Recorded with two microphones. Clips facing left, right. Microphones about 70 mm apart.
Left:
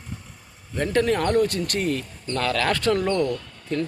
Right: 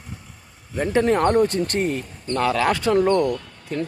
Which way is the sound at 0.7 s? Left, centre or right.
Centre.